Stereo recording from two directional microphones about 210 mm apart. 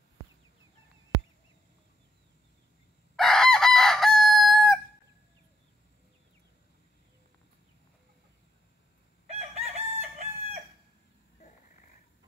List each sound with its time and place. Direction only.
3.2 s chicken: centre (ahead or behind)
9.3 s chicken: 30° right (ahead or behind)